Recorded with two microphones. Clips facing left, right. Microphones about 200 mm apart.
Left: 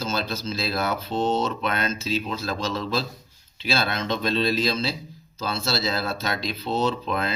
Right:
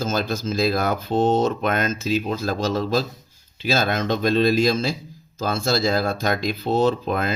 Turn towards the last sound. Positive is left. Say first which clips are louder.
# right 4 dB
turn(degrees=-45)  # may be behind; listen again after turning